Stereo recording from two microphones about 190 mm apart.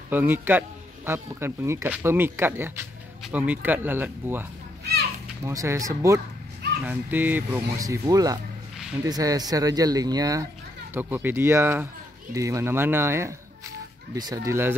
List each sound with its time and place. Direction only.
0.1 s speech: 10° right (ahead or behind)